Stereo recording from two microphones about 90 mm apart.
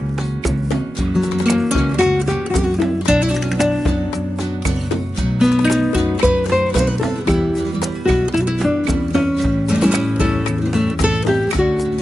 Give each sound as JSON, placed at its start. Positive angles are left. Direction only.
{"t": 1.1, "sound": "music", "side_deg": 0}
{"t": 5.4, "sound": "music", "side_deg": -5}
{"t": 8.0, "sound": "music", "side_deg": 0}